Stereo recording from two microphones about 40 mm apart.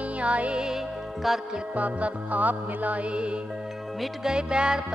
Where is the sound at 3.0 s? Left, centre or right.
Right.